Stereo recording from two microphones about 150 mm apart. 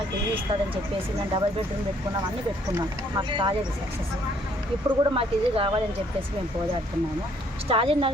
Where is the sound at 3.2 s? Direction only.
30° right (ahead or behind).